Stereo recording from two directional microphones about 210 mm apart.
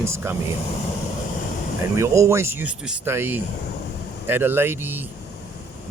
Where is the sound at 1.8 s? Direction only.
15° right (ahead or behind).